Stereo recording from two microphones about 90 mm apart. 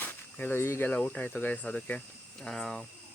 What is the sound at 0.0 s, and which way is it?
Speech, 20° left (ahead or behind).